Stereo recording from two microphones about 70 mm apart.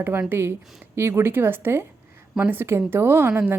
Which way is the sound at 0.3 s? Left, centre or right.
Right.